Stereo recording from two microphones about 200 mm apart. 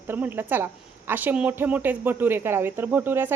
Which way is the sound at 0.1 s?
10° right (ahead or behind).